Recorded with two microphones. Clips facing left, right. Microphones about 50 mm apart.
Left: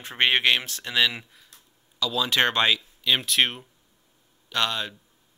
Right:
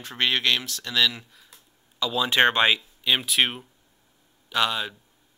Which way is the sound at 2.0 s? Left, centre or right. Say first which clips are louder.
Right 2 dB; right.